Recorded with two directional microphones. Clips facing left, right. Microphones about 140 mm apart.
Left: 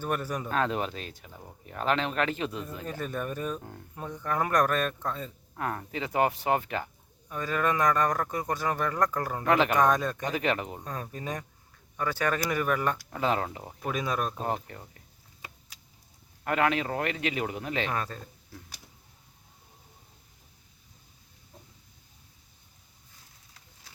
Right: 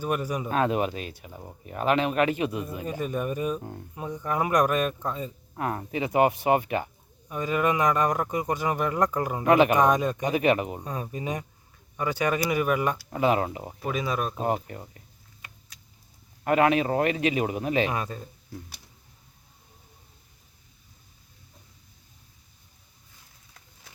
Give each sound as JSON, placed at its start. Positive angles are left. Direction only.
{"t": 0.0, "sound": "speech", "side_deg": -10}
{"t": 13.7, "sound": "speech", "side_deg": -5}
{"t": 16.4, "sound": "speech", "side_deg": -20}